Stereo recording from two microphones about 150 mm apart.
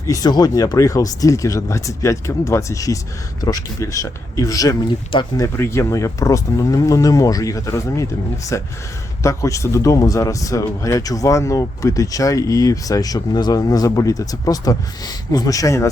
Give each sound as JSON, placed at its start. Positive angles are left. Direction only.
{"t": 0.0, "sound": "speech", "side_deg": 25}
{"t": 9.2, "sound": "speech", "side_deg": 20}